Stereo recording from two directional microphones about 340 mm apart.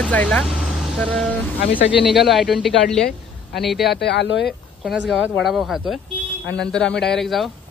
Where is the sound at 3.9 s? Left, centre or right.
Left.